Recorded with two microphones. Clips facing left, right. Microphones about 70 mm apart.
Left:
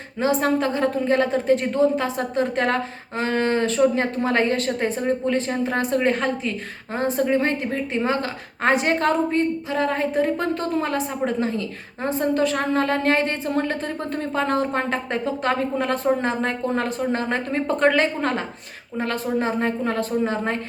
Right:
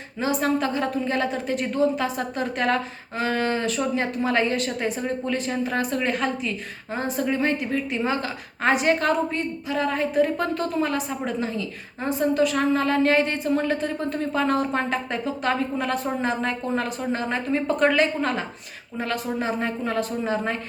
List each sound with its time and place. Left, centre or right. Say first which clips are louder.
0.2 s a woman's voice: left 3 dB; left